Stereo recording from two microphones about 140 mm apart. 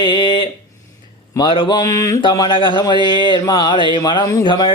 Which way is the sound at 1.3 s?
30° left (ahead or behind).